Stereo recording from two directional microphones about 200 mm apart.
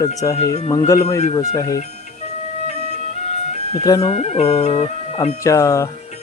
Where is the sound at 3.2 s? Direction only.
35° left (ahead or behind).